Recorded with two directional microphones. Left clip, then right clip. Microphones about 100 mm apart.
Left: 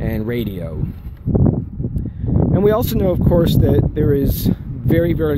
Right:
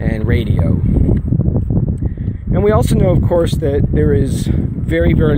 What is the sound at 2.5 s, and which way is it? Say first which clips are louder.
Speech: right 3 dB; 45° left (ahead or behind).